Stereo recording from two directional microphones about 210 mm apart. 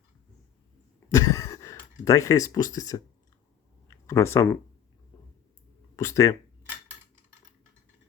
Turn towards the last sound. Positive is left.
turn(degrees=15)  # may be behind; listen again after turning